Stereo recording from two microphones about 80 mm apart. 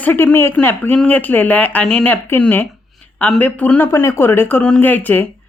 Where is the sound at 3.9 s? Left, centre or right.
Left.